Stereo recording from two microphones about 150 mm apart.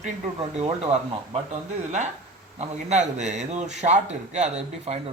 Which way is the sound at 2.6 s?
50° right (ahead or behind).